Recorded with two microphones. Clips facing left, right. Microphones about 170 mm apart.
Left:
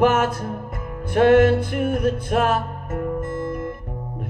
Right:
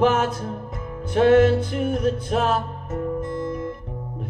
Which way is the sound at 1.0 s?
55° left (ahead or behind).